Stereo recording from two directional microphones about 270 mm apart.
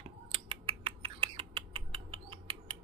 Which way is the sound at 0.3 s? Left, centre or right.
Centre.